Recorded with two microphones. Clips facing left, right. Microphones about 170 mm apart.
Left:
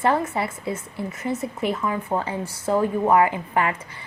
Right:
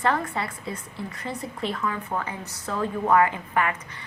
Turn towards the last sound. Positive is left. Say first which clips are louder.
# left 3 dB
turn(degrees=25)  # may be behind; listen again after turning